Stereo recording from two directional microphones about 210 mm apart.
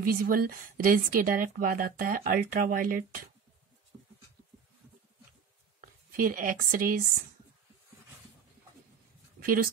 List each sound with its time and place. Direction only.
0.0 s a woman's voice: 45° right (ahead or behind)
5.8 s speech: 40° right (ahead or behind)
9.4 s speech: 40° right (ahead or behind)